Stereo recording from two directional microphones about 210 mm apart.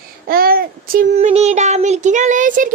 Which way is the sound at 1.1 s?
30° right (ahead or behind).